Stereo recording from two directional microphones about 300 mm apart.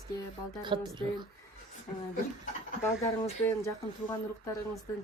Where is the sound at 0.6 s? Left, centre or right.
Centre.